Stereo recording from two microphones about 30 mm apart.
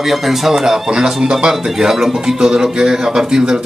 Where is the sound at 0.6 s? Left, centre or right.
Right.